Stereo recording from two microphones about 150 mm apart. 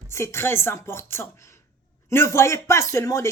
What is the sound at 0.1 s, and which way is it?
Speech, 15° left (ahead or behind).